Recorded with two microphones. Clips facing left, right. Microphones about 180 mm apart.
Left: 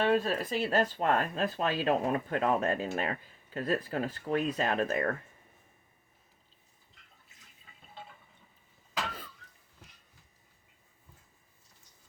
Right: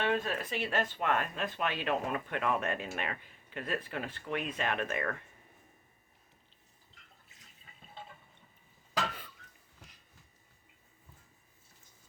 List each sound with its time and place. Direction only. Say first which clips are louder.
0.0 s speech: left 5 dB; 35° left (ahead or behind)